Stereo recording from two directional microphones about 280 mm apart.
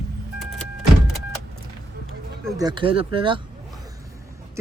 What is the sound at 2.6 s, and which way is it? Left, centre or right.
Speech, centre.